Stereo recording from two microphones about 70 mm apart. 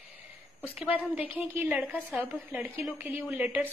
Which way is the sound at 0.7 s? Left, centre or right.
Centre.